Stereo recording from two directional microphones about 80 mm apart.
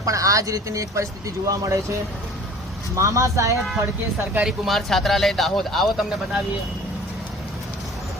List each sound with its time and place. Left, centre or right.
0.0 s speech: right
2.9 s speech: right
4.4 s speech: centre